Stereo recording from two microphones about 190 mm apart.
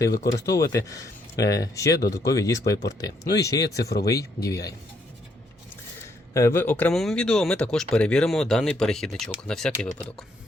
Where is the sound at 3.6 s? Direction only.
55° left (ahead or behind).